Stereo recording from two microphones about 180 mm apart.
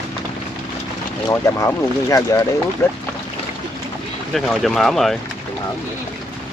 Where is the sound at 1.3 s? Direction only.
15° left (ahead or behind).